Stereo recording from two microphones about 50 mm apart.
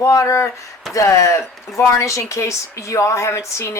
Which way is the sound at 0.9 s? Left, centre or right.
Left.